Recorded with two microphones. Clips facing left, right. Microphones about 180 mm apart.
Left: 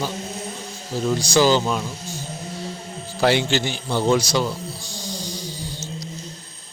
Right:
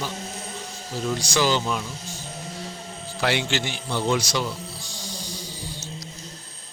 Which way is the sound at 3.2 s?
35° left (ahead or behind).